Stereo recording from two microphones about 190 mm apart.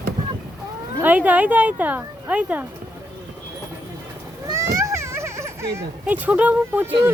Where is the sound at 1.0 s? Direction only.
10° right (ahead or behind).